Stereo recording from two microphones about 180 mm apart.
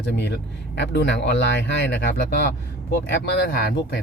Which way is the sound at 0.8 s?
75° left (ahead or behind).